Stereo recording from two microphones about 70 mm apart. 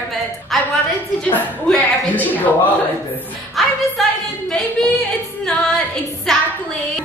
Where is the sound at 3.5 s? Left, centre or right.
Centre.